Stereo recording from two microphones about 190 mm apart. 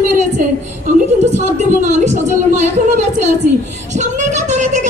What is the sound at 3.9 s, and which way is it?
Speech, 40° right (ahead or behind).